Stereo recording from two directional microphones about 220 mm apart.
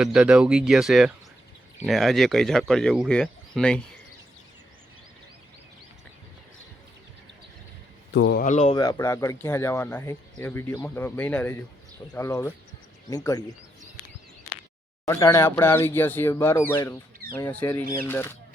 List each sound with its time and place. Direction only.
0.0 s speech: 5° right (ahead or behind)
8.1 s speech: 50° left (ahead or behind)
8.4 s speech: 30° left (ahead or behind)
8.7 s speech: 15° left (ahead or behind)
15.0 s speech: 15° left (ahead or behind)